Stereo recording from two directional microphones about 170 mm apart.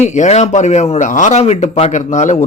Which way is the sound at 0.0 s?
45° left (ahead or behind).